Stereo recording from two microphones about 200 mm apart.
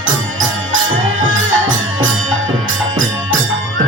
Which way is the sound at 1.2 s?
75° right (ahead or behind).